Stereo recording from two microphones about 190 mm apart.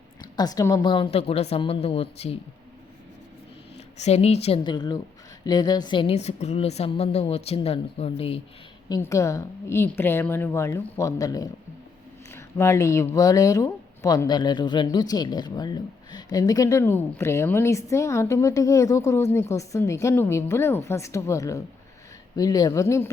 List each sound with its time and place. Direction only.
0.2 s a woman's voice: 20° left (ahead or behind)
3.8 s a woman's voice: 35° left (ahead or behind)
8.9 s speech: 15° left (ahead or behind)